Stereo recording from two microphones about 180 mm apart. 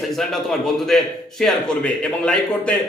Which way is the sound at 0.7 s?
Centre (ahead or behind).